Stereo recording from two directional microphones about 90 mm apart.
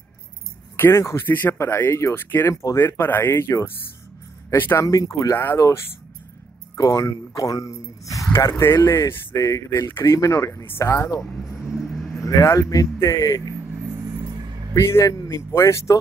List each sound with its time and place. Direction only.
0.7 s speech: 25° left (ahead or behind)
4.8 s speech: 40° left (ahead or behind)
8.5 s speech: 30° left (ahead or behind)
11.6 s vehicle: 5° right (ahead or behind)
12.4 s speech: 35° left (ahead or behind)
14.0 s a sound: 55° right (ahead or behind)
14.7 s speech: 30° left (ahead or behind)